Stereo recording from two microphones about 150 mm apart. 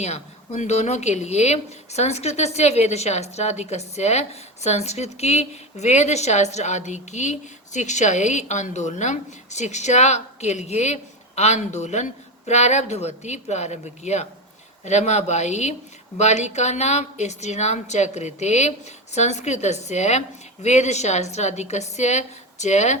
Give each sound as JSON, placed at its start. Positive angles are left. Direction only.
{"t": 0.0, "sound": "speech", "side_deg": 45}